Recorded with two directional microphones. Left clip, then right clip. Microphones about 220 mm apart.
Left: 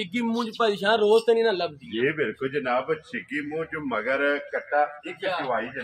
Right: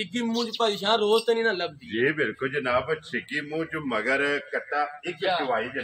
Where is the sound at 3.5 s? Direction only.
50° right (ahead or behind).